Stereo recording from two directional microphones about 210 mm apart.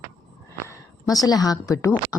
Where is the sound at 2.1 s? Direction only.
5° right (ahead or behind).